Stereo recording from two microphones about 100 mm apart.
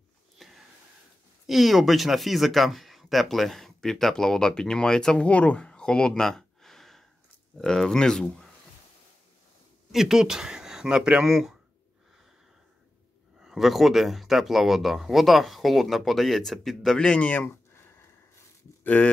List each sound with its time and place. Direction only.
0.4 s a sound: centre (ahead or behind)
1.5 s speech: centre (ahead or behind)
9.9 s speech: 5° right (ahead or behind)
13.4 s speech: 5° right (ahead or behind); by 17.8 s 15° left (ahead or behind)
18.9 s speech: 15° left (ahead or behind)